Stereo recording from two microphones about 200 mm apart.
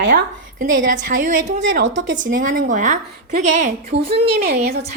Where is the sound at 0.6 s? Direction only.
40° right (ahead or behind).